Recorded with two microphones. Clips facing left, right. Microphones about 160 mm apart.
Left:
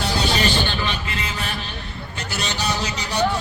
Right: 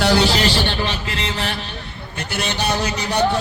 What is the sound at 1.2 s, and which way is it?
Mantra, 75° right (ahead or behind).